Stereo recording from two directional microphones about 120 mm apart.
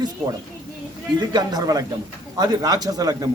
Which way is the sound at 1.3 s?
35° right (ahead or behind).